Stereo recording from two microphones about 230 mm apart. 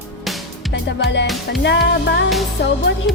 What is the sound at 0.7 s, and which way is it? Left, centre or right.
Music, left.